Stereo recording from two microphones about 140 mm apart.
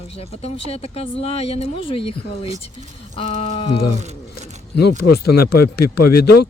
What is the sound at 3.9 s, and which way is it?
Speech, 55° right (ahead or behind).